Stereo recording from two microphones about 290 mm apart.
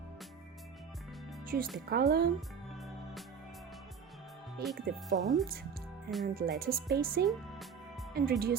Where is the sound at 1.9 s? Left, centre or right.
Right.